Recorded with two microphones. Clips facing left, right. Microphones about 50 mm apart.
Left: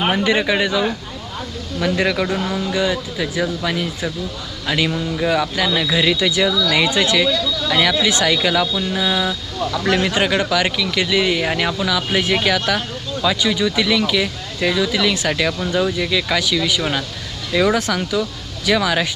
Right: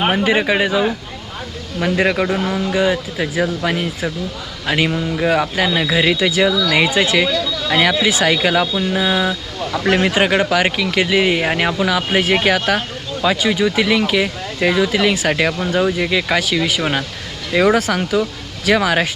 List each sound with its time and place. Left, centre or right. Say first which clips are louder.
0.0 s speech: right 2 dB; centre
2.2 s speech: right 2 dB; centre
5.3 s speech: right 2 dB; right